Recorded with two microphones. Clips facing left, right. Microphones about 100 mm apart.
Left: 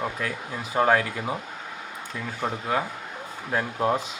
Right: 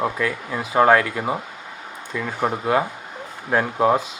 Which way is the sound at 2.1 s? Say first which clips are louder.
Right 7 dB; 85° right.